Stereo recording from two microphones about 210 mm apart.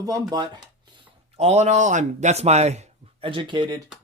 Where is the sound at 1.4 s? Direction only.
30° right (ahead or behind).